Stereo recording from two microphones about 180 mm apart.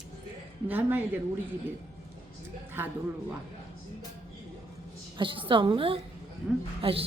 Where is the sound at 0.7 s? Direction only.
10° right (ahead or behind).